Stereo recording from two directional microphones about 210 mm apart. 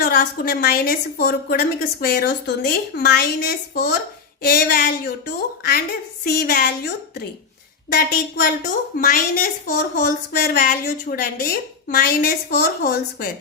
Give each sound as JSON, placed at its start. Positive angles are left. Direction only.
{"t": 0.0, "sound": "a woman's voice", "side_deg": 45}
{"t": 7.9, "sound": "a woman's voice", "side_deg": 45}